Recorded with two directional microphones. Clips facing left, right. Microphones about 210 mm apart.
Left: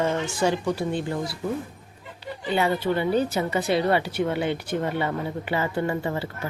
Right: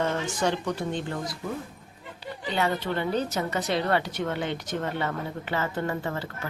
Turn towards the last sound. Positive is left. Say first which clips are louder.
# left 4 dB
turn(degrees=15)  # may be behind; listen again after turning